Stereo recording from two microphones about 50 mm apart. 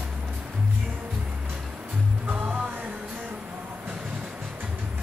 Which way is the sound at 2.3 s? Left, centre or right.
Right.